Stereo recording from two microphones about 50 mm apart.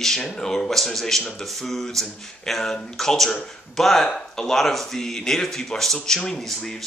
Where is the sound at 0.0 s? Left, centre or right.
Centre.